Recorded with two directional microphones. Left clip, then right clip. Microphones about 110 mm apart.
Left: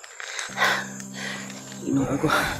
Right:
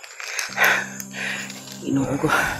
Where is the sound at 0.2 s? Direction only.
50° right (ahead or behind).